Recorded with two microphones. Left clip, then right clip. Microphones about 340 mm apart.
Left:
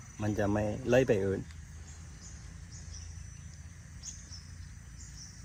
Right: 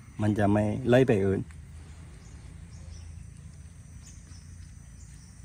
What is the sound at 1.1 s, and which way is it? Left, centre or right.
Speech, right.